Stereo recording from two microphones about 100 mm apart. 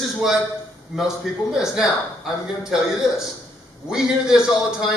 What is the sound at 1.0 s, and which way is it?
A man's voice, 5° right (ahead or behind).